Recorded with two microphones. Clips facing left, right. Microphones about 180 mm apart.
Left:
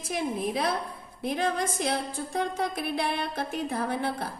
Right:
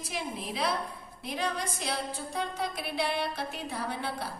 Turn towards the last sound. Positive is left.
turn(degrees=50)  # may be behind; listen again after turning